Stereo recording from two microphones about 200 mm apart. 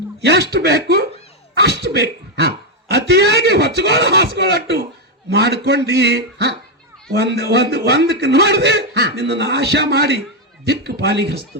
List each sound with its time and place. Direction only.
0.2 s a man's voice: 55° right (ahead or behind)